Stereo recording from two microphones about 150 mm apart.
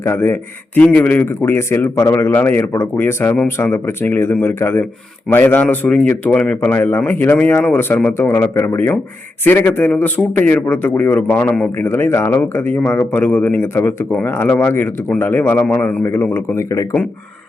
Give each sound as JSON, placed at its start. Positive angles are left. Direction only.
{"t": 0.0, "sound": "a man's voice", "side_deg": 15}